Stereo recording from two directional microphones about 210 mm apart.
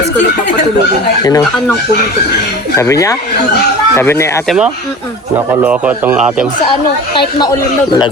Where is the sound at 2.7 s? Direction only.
15° left (ahead or behind).